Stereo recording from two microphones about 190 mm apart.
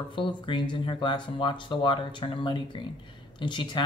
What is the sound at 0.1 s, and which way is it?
Speech, 25° left (ahead or behind).